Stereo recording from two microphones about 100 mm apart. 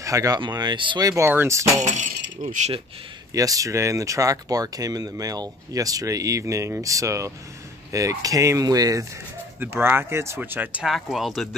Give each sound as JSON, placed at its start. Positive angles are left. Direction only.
{"t": 0.0, "sound": "speech", "side_deg": -35}
{"t": 0.4, "sound": "speech", "side_deg": -45}
{"t": 1.0, "sound": "speech", "side_deg": -35}
{"t": 3.3, "sound": "speech", "side_deg": -35}
{"t": 9.6, "sound": "speech", "side_deg": -20}
{"t": 10.9, "sound": "speech", "side_deg": 0}